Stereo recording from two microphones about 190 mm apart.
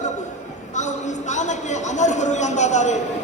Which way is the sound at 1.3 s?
40° left (ahead or behind).